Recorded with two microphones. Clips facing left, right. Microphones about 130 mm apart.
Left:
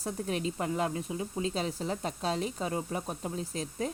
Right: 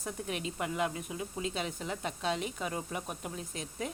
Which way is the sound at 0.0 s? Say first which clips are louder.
Left 4 dB; 35° left (ahead or behind).